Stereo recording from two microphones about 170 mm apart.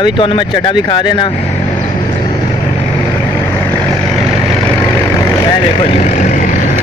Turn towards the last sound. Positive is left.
turn(degrees=40)  # may be behind; listen again after turning